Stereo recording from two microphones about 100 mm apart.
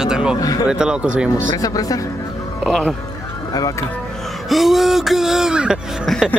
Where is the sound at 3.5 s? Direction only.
35° left (ahead or behind).